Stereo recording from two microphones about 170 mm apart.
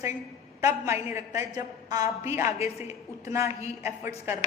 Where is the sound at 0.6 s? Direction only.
15° right (ahead or behind).